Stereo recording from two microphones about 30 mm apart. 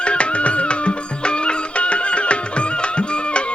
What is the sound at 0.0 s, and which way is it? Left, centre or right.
Music, left.